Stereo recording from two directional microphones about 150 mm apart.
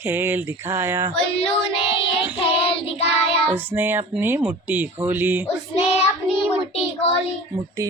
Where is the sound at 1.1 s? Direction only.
40° left (ahead or behind).